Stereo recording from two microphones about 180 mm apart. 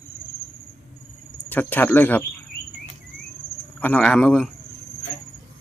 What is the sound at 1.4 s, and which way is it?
Speech, 10° left (ahead or behind).